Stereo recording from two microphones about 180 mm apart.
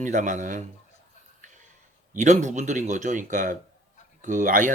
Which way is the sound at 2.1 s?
45° right (ahead or behind).